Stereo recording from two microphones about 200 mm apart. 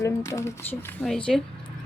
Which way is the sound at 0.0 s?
15° left (ahead or behind).